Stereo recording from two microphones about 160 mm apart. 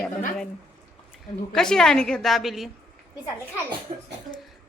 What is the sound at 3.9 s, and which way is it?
Cough, 45° right (ahead or behind).